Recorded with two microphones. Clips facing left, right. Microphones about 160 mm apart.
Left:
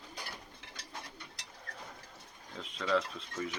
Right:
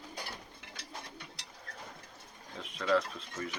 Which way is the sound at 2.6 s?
5° right (ahead or behind).